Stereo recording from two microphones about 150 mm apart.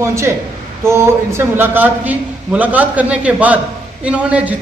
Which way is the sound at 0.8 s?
15° right (ahead or behind).